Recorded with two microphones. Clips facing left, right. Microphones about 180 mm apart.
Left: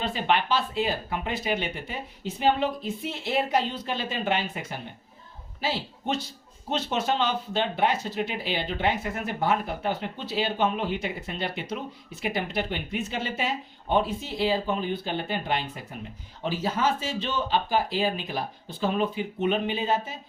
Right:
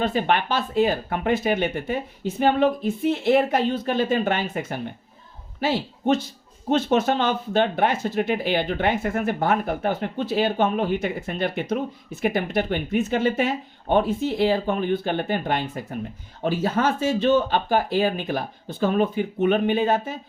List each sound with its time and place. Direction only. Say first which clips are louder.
0.0 s speech: right 4 dB; 50° right (ahead or behind)